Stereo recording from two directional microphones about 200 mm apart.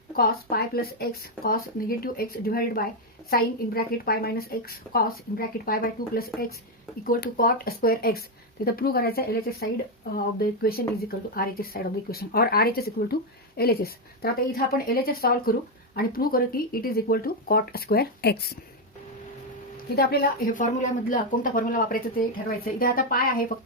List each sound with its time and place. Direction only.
0.2 s speech: 50° left (ahead or behind)
5.6 s speech: 50° left (ahead or behind)
20.0 s speech: 50° left (ahead or behind)